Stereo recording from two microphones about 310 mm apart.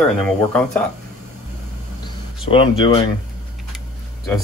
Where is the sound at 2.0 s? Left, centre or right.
Centre.